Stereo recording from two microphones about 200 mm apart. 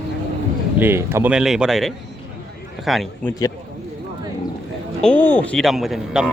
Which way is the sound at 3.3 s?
15° left (ahead or behind).